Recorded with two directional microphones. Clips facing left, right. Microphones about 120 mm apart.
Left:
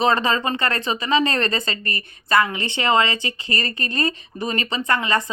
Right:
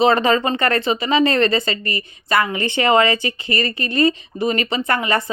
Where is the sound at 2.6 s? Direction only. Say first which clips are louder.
Right 4 dB; 30° left (ahead or behind).